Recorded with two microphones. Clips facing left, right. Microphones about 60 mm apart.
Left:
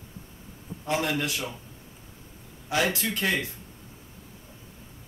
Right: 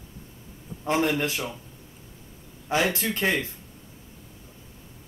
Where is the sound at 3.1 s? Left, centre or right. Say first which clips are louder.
Right 2 dB; right.